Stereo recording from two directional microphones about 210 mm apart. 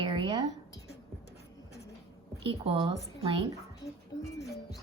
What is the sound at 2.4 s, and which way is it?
Speech, 25° right (ahead or behind).